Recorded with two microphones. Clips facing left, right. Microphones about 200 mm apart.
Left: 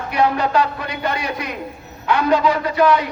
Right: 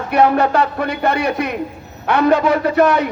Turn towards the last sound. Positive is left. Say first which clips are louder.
# right 2 dB
turn(degrees=-60)  # may be behind; listen again after turning